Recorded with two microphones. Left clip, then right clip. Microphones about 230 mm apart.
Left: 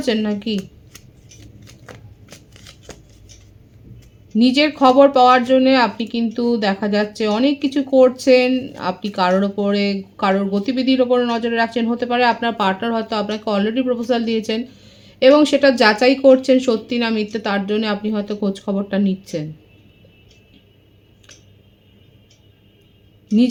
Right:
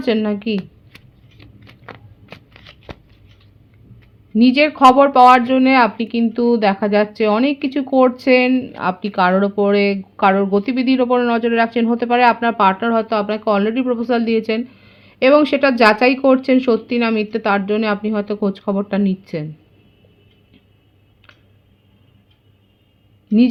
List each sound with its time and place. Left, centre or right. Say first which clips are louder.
0.0 s scissors: right 2 dB; right
4.4 s speech: right 3 dB; right